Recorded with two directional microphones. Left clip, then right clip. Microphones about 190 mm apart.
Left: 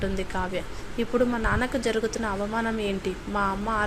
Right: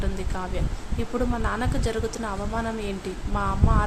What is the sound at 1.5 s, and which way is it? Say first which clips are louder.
Speech: left 2 dB; 5° left (ahead or behind).